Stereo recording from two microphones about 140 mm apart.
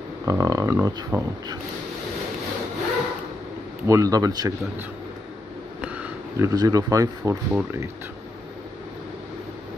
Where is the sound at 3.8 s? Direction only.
25° right (ahead or behind).